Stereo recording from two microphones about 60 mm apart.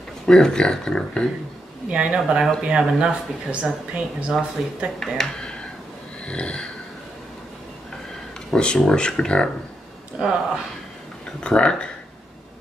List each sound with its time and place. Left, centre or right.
0.3 s speech: centre
1.9 s speech: centre
5.0 s speech: centre
6.2 s a sound: centre
8.5 s speech: centre
10.1 s speech: centre
11.4 s speech: centre